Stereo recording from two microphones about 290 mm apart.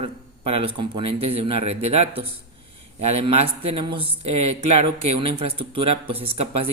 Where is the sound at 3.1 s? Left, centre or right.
Centre.